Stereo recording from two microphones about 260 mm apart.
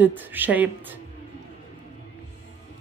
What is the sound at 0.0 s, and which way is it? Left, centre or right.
Speech, centre.